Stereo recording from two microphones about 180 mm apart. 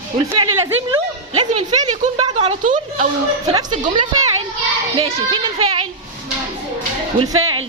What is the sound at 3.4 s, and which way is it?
A child's voice, 20° right (ahead or behind).